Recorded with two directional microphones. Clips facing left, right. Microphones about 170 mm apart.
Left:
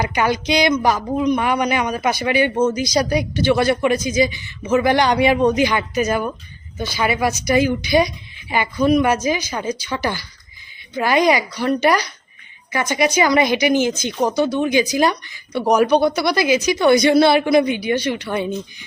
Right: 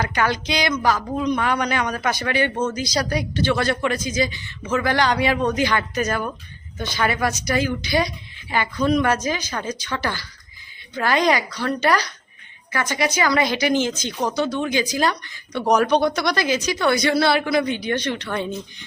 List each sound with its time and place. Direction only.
0.0 s speech: 15° left (ahead or behind)